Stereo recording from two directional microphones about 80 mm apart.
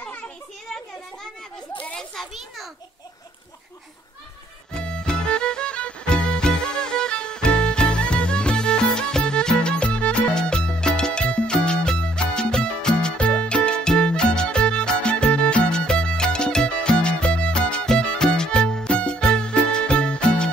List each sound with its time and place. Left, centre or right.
1.7 s children playing: centre
2.0 s children playing: centre
4.7 s music: centre